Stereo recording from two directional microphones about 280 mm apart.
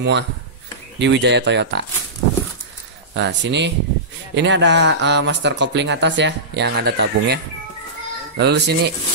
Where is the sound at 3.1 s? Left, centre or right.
Right.